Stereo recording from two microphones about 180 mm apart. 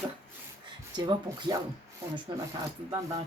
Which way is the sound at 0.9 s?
25° right (ahead or behind).